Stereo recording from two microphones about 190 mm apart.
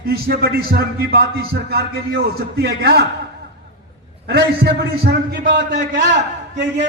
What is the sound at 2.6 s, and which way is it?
Speech, 55° right (ahead or behind).